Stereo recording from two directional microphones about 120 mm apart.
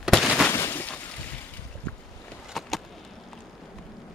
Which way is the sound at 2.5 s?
Centre (ahead or behind).